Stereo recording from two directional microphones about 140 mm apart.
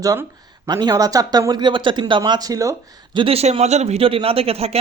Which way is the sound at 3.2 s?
45° right (ahead or behind).